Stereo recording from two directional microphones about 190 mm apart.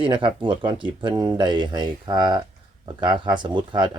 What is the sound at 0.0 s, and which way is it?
Speech, 25° right (ahead or behind).